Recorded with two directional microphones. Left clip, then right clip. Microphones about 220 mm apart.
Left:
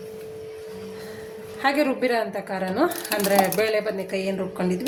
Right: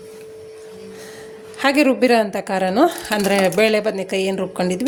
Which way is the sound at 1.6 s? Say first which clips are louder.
Right 6 dB; 40° right (ahead or behind).